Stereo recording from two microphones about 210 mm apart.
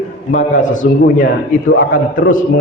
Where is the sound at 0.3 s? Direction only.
35° left (ahead or behind).